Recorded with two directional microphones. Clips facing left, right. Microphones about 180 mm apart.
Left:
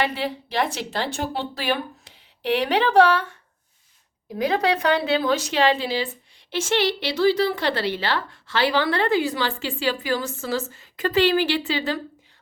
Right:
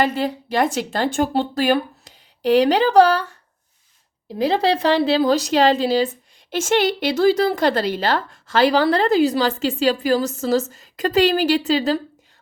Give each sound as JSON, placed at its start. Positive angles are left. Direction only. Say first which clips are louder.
{"t": 0.0, "sound": "speech", "louder": "right 5 dB", "side_deg": -45}
{"t": 4.4, "sound": "a woman's voice", "louder": "right 3 dB", "side_deg": -30}